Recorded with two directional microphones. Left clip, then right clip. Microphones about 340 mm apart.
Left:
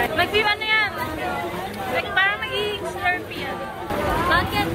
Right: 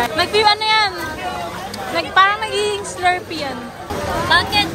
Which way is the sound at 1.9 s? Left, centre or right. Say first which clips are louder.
Right 7 dB; centre.